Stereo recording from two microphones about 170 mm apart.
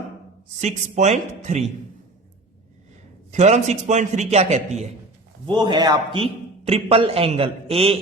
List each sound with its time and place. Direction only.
0.6 s speech: 45° right (ahead or behind)
3.3 s a man's voice: 40° right (ahead or behind)
5.5 s a man's voice: 25° right (ahead or behind)